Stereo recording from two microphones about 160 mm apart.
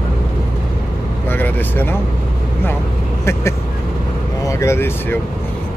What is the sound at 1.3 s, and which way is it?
Speech, 10° left (ahead or behind).